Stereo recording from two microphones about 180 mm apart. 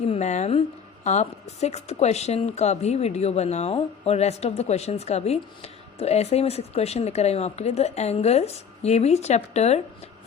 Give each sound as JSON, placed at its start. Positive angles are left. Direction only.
{"t": 0.0, "sound": "speech", "side_deg": 35}